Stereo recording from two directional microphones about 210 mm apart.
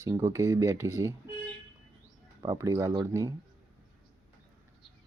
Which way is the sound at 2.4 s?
15° right (ahead or behind).